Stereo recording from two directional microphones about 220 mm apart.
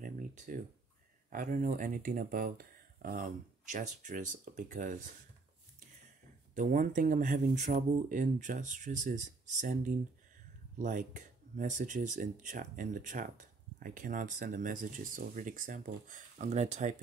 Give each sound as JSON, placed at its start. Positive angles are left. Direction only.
{"t": 0.0, "sound": "a sound", "side_deg": -40}
{"t": 1.3, "sound": "speech", "side_deg": -40}
{"t": 6.5, "sound": "speech", "side_deg": -35}